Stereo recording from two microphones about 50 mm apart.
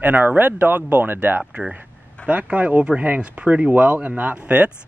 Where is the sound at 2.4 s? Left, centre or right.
Right.